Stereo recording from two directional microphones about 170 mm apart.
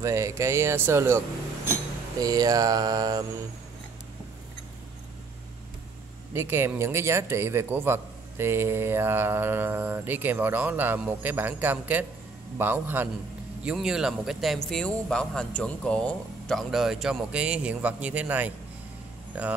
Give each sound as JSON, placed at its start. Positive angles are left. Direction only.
{"t": 0.0, "sound": "a man's voice", "side_deg": -15}
{"t": 2.1, "sound": "a sound", "side_deg": -20}
{"t": 6.3, "sound": "a man's voice", "side_deg": -15}